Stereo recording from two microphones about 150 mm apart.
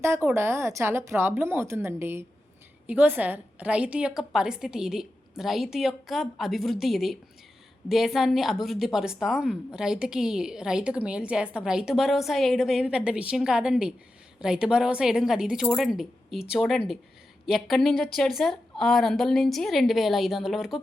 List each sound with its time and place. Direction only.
0.0 s a woman's voice: 15° right (ahead or behind)